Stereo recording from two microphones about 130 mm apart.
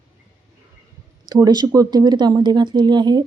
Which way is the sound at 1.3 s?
30° right (ahead or behind).